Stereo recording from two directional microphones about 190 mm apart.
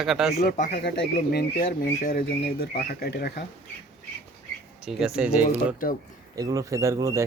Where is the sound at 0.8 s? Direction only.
55° left (ahead or behind).